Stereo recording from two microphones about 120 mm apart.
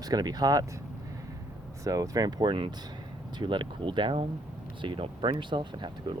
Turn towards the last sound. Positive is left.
turn(degrees=-40)  # may be behind; listen again after turning